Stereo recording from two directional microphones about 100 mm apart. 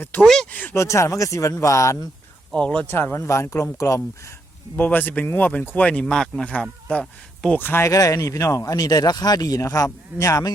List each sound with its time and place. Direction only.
0.2 s speech: 5° left (ahead or behind)
0.5 s speech: 15° left (ahead or behind)
0.8 s speech: 30° left (ahead or behind)
2.5 s speech: 10° left (ahead or behind)
2.9 s speech: 25° left (ahead or behind)
4.8 s speech: 15° left (ahead or behind)
7.6 s speech: 25° left (ahead or behind)